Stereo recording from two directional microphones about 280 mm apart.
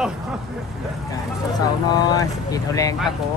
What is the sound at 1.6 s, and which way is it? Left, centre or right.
Speech, centre.